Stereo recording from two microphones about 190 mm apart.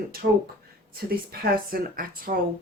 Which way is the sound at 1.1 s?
50° right (ahead or behind).